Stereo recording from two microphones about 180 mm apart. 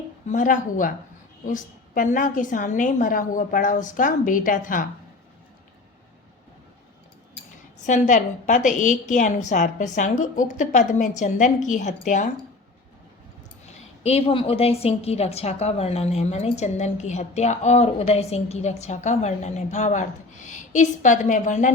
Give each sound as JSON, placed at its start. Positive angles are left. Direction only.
{"t": 0.3, "sound": "a woman's voice", "side_deg": 45}
{"t": 7.9, "sound": "a woman's voice", "side_deg": 45}
{"t": 14.0, "sound": "a woman's voice", "side_deg": 35}